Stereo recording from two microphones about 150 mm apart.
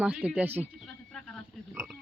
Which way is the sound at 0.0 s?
5° right (ahead or behind).